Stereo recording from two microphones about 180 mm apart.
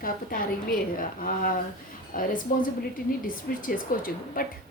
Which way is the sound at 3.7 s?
50° left (ahead or behind).